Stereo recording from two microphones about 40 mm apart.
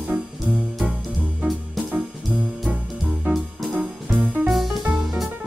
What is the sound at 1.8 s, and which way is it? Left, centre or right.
Music, right.